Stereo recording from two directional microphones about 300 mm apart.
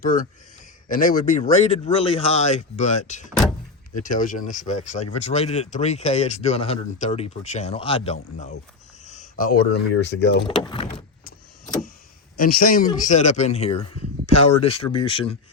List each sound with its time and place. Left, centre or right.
0.0 s speech: left
10.6 s speech: centre
12.4 s speech: left